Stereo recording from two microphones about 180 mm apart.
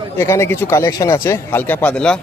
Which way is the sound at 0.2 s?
15° left (ahead or behind).